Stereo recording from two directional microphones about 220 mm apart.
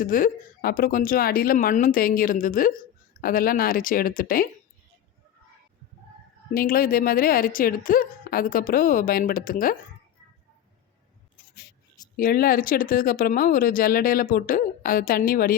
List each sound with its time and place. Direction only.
0.0 s speech: 40° left (ahead or behind)
6.5 s speech: 40° left (ahead or behind)
12.1 s speech: 40° left (ahead or behind)